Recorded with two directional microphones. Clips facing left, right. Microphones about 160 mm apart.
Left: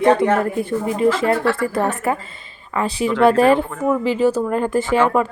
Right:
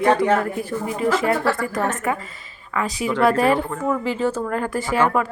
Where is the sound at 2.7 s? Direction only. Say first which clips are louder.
Left 3 dB; 30° left (ahead or behind).